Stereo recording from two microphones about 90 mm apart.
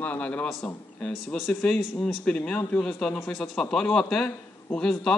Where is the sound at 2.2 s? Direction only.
10° left (ahead or behind).